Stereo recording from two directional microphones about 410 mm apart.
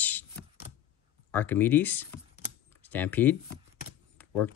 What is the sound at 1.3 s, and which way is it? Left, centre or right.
Speech, centre.